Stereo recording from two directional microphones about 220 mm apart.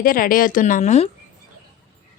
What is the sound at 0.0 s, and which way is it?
A woman's voice, 40° left (ahead or behind).